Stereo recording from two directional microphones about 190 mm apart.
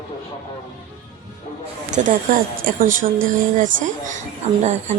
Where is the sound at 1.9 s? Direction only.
45° right (ahead or behind).